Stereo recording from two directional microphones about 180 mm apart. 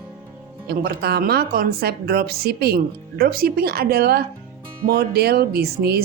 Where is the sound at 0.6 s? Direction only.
60° right (ahead or behind).